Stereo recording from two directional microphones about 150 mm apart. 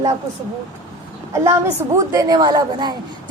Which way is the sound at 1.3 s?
20° right (ahead or behind).